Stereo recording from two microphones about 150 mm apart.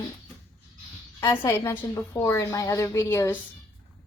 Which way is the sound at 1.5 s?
15° left (ahead or behind).